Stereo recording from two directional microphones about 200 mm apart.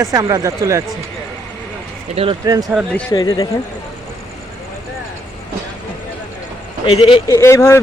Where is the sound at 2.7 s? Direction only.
5° left (ahead or behind).